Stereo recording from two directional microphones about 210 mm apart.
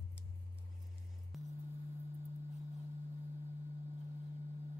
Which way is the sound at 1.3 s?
Centre (ahead or behind).